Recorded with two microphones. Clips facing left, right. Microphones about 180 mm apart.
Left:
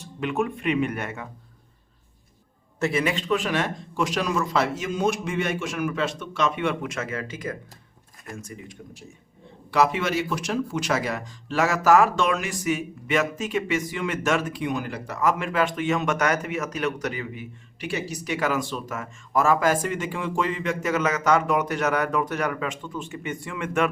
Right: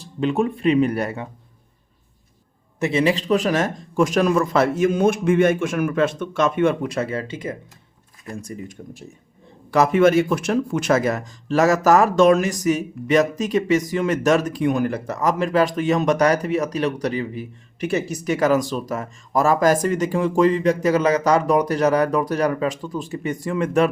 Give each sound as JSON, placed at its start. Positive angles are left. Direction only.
{"t": 0.0, "sound": "a man's voice", "side_deg": -30}
{"t": 2.8, "sound": "a man's voice", "side_deg": -30}
{"t": 9.7, "sound": "a man's voice", "side_deg": -50}